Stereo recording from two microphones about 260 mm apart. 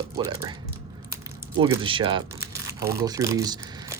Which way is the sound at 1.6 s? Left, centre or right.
Centre.